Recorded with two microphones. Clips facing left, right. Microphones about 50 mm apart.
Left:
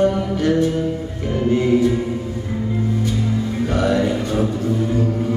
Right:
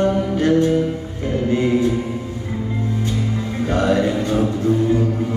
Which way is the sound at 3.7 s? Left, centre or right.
Right.